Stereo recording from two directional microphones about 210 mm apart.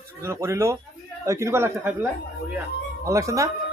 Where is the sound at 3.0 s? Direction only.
15° right (ahead or behind).